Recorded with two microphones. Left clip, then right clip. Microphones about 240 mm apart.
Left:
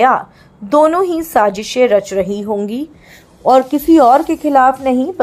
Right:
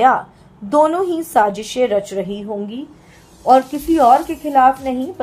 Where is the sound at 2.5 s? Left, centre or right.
Left.